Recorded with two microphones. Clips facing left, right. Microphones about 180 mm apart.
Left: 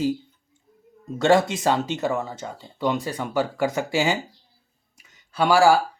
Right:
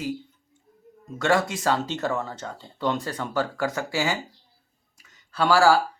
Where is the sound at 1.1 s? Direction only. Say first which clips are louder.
Left 4 dB; 25° left (ahead or behind).